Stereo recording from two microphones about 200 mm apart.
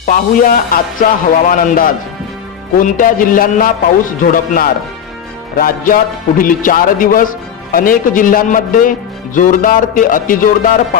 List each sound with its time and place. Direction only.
0.0 s a man's voice: 45° left (ahead or behind)